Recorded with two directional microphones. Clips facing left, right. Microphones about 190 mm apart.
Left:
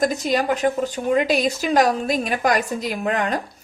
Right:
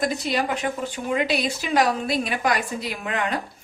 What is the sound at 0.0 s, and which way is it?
Speech, 45° left (ahead or behind).